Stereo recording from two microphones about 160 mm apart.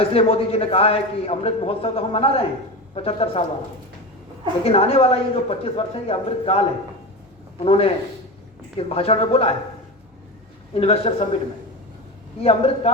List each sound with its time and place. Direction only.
0.0 s a man's voice: 40° left (ahead or behind)
4.6 s a man's voice: 40° left (ahead or behind)
10.8 s a man's voice: 40° left (ahead or behind)
12.4 s a man's voice: 40° left (ahead or behind)